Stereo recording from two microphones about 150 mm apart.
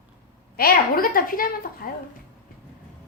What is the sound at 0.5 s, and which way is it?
A woman's voice, 80° left.